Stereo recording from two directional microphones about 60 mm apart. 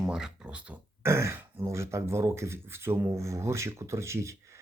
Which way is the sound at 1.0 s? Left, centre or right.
Right.